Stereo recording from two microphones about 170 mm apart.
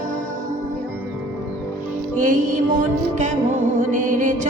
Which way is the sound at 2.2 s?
50° right (ahead or behind).